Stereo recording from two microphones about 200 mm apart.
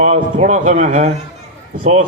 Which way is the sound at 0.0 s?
35° right (ahead or behind).